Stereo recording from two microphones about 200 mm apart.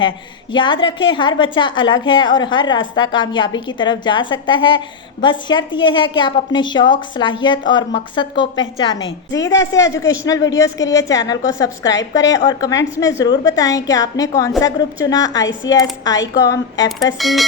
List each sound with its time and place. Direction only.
0.5 s a woman's voice: 25° left (ahead or behind)
17.2 s speech: centre (ahead or behind)